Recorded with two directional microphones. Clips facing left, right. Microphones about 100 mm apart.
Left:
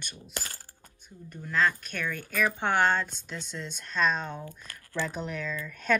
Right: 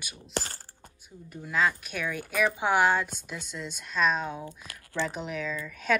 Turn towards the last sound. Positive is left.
turn(degrees=-5)  # may be behind; listen again after turning